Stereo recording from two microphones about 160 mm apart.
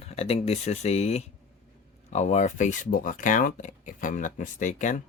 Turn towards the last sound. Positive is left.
turn(degrees=50)  # may be behind; listen again after turning